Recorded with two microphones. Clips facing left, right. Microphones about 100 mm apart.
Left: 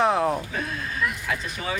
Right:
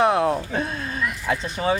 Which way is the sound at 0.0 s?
Centre (ahead or behind).